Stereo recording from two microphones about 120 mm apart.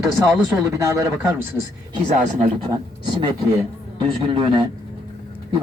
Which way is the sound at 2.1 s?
90° right.